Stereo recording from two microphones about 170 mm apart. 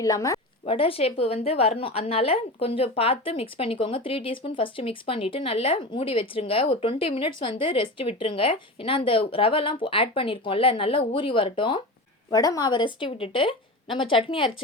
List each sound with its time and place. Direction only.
0.0 s speech: 20° left (ahead or behind)
0.6 s a woman's voice: 35° left (ahead or behind)